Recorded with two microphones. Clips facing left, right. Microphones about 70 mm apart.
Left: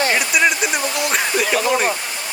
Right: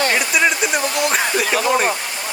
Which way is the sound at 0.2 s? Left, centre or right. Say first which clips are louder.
Even; centre.